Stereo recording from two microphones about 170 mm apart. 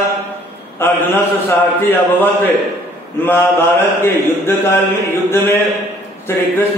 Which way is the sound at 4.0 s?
15° left (ahead or behind).